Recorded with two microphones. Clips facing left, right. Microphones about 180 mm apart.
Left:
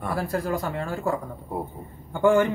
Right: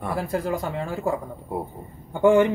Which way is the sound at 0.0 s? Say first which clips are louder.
Right 1 dB; 20° right (ahead or behind).